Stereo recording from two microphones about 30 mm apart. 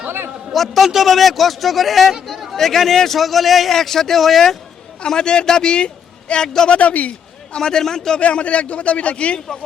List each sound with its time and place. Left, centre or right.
0.5 s a man's voice: centre
5.0 s a man's voice: left
6.7 s a man's voice: left
7.5 s a man's voice: left
8.2 s a man's voice: left